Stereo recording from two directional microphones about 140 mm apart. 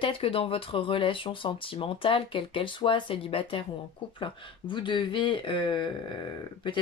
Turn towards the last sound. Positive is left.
turn(degrees=35)  # may be behind; listen again after turning